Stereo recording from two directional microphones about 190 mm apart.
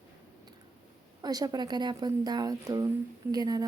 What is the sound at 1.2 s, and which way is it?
A woman's voice, 20° right (ahead or behind).